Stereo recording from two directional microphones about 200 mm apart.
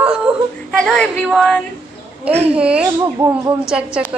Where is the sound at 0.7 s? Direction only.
5° left (ahead or behind).